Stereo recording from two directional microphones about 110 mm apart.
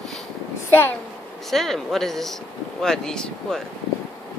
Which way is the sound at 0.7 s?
15° left (ahead or behind).